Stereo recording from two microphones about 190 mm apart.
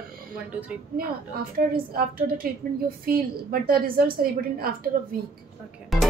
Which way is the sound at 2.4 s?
50° right (ahead or behind).